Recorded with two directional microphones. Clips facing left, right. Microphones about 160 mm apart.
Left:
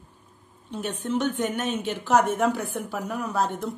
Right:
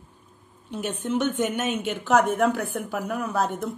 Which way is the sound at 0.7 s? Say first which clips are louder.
Right 1 dB; centre (ahead or behind).